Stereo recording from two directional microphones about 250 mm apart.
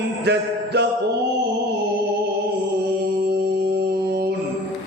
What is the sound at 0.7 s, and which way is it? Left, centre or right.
Music, right.